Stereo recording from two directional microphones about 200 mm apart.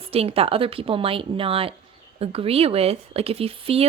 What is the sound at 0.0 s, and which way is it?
Speech, 30° right (ahead or behind).